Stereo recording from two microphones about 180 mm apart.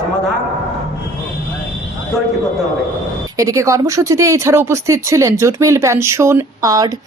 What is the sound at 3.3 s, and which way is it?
Speech, 15° right (ahead or behind).